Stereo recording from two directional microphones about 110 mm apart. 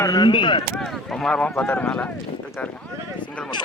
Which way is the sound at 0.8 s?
5° left (ahead or behind).